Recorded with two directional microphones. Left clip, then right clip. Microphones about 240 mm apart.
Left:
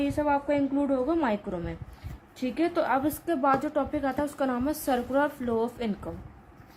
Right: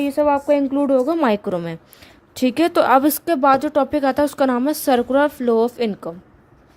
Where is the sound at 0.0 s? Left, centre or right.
Right.